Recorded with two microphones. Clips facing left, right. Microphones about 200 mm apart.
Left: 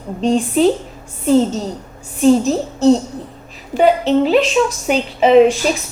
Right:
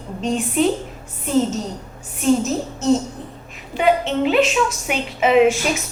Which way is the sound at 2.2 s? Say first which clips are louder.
Left 5 dB; 35° left (ahead or behind).